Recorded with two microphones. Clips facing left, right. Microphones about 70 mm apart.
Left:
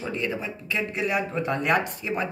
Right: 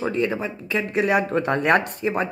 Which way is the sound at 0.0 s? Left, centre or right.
Right.